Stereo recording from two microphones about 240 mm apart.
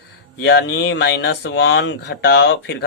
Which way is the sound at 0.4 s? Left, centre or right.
Left.